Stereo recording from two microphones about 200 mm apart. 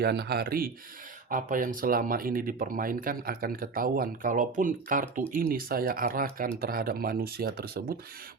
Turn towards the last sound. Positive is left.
turn(degrees=-50)  # may be behind; listen again after turning